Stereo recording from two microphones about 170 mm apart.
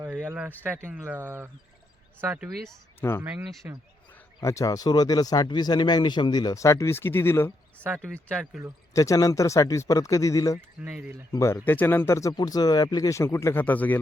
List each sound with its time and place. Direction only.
0.2 s a sound: 10° right (ahead or behind)
0.9 s speech: 15° right (ahead or behind)
2.2 s speech: 10° right (ahead or behind)
3.0 s speech: 15° left (ahead or behind)
3.6 s speech: 10° right (ahead or behind)
4.4 s speech: 20° left (ahead or behind); by 8.6 s 5° left (ahead or behind)
8.9 s speech: 20° left (ahead or behind)
10.8 s speech: 5° right (ahead or behind)
11.3 s speech: 15° left (ahead or behind)